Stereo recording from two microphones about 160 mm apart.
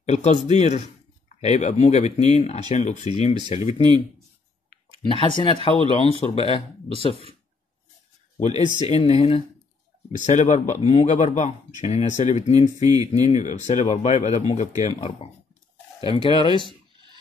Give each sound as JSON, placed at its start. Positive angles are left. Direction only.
{"t": 0.0, "sound": "speech", "side_deg": 45}
{"t": 5.0, "sound": "speech", "side_deg": 30}
{"t": 8.4, "sound": "speech", "side_deg": 45}
{"t": 12.8, "sound": "speech", "side_deg": -20}
{"t": 13.3, "sound": "speech", "side_deg": 50}
{"t": 16.3, "sound": "speech", "side_deg": 30}